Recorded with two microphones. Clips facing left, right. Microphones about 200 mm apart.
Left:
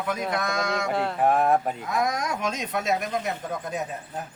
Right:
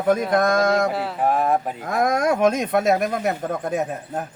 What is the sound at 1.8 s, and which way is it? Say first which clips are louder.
Speech: right 6 dB; 50° right (ahead or behind).